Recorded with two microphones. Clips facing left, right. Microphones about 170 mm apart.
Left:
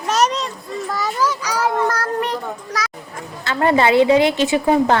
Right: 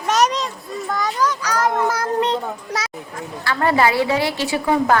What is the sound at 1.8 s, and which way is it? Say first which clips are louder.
Speech: even; 10° right (ahead or behind).